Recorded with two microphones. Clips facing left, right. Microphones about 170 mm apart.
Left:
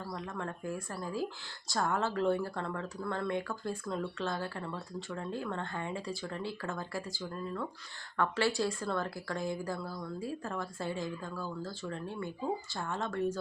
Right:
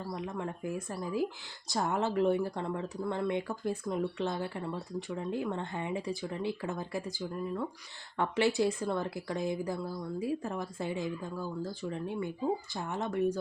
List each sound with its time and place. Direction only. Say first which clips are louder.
0.1 s speech: right 3 dB; 15° right (ahead or behind)